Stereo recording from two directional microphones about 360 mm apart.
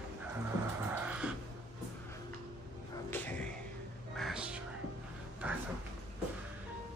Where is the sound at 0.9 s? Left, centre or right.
Centre.